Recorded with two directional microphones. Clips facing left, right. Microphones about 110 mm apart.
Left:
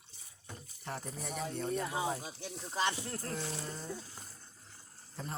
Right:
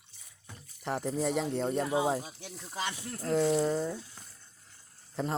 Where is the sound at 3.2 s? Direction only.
80° right.